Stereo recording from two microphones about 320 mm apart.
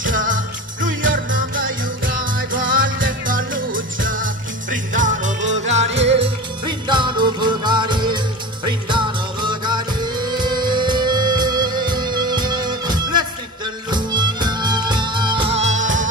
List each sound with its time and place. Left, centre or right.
0.0 s music: right